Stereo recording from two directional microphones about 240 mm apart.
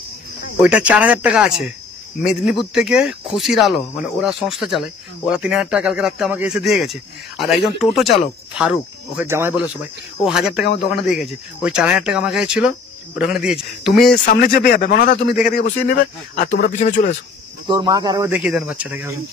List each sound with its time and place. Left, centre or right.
0.6 s speech: centre
14.2 s a man's voice: left
15.4 s a man's voice: left
17.6 s speech: centre